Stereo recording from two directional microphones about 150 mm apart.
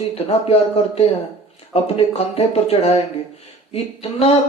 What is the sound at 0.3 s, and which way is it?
A man's voice, 45° left (ahead or behind).